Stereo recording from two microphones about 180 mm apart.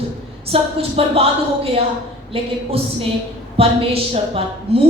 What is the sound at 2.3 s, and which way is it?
Speech, 30° right (ahead or behind).